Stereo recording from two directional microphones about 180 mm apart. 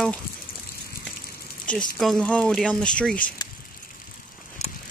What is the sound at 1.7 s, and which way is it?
Speech, 5° left (ahead or behind).